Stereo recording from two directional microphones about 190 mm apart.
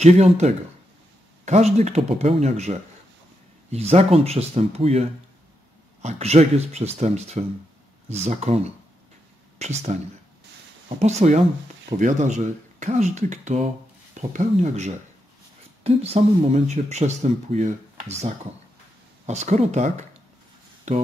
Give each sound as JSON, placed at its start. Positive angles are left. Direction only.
{"t": 0.0, "sound": "speech", "side_deg": -35}
{"t": 6.0, "sound": "speech", "side_deg": -35}
{"t": 9.6, "sound": "speech", "side_deg": -35}
{"t": 11.0, "sound": "speech", "side_deg": -35}